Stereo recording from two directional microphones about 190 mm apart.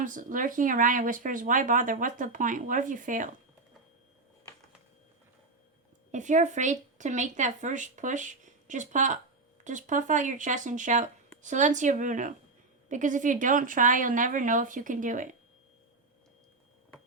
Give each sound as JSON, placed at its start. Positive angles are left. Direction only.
{"t": 0.0, "sound": "speech", "side_deg": -45}
{"t": 6.1, "sound": "speech", "side_deg": -40}